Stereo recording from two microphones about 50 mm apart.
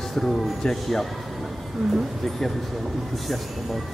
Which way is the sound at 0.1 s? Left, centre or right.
Centre.